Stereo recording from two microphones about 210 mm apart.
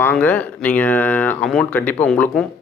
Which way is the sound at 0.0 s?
5° left (ahead or behind).